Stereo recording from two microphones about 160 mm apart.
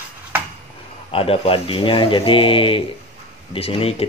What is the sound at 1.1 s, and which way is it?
Speech, 35° left (ahead or behind).